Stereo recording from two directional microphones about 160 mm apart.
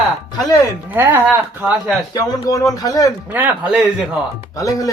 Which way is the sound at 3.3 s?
10° right (ahead or behind).